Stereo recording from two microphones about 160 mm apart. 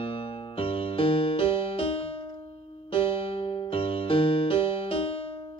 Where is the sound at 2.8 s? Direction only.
35° left (ahead or behind).